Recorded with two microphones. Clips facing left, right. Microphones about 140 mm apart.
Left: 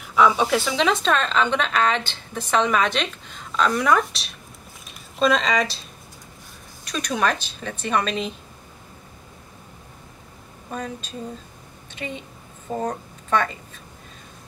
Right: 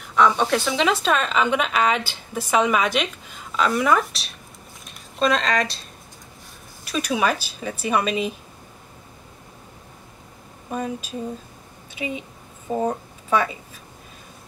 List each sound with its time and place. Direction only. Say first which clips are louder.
0.0 s a woman's voice: even; 5° left (ahead or behind)
10.7 s a woman's voice: right 4 dB; 10° right (ahead or behind)
11.9 s a sound: right 3 dB; 5° right (ahead or behind)